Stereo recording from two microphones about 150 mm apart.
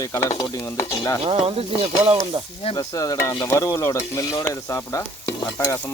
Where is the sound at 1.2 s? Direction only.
40° right (ahead or behind).